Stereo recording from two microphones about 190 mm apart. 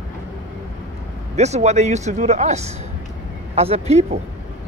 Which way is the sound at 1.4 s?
35° right (ahead or behind).